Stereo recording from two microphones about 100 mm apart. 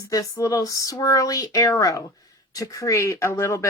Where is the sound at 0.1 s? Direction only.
35° left (ahead or behind).